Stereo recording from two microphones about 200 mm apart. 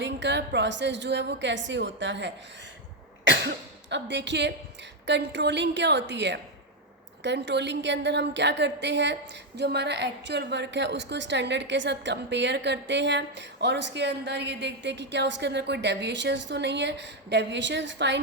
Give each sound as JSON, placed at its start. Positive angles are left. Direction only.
{"t": 0.0, "sound": "a woman's voice", "side_deg": -60}